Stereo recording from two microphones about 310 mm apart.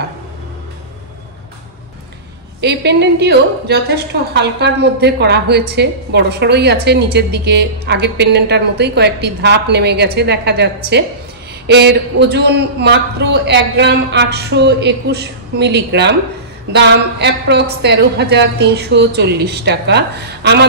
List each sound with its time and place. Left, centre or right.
2.6 s a woman's voice: right